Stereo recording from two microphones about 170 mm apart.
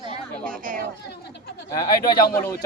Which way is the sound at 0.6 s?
50° right (ahead or behind).